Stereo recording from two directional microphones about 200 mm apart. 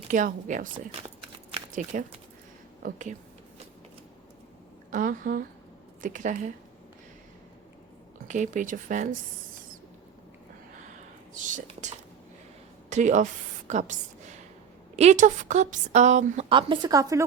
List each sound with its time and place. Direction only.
0.1 s a woman's voice: 40° right (ahead or behind)
1.2 s a sound: 25° right (ahead or behind)
1.7 s a woman's voice: 40° right (ahead or behind)
4.9 s a woman's voice: 40° right (ahead or behind)
8.3 s a woman's voice: 40° right (ahead or behind)
11.3 s speech: 40° right (ahead or behind)
13.7 s a sound: 40° right (ahead or behind)
14.9 s a woman's voice: 35° right (ahead or behind); by 17.2 s 15° right (ahead or behind)